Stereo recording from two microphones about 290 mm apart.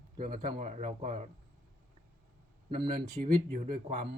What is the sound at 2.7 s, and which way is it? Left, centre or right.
Speech, centre.